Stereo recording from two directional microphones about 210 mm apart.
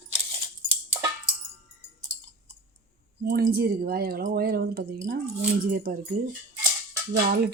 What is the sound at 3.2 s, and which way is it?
Speech, 45° right (ahead or behind).